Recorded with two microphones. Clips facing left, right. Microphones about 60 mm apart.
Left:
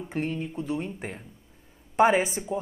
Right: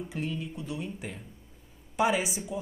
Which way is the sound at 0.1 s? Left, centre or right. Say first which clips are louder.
Left 8 dB; left.